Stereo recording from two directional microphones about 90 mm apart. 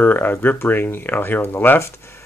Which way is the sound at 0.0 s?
20° left (ahead or behind).